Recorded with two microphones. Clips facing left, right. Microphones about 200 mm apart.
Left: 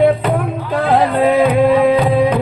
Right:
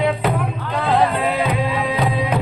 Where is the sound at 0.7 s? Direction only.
50° left (ahead or behind).